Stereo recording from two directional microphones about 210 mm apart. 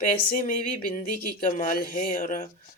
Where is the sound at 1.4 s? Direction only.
40° left (ahead or behind).